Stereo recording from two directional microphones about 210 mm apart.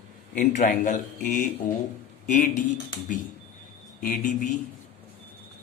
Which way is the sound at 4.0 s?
40° left (ahead or behind).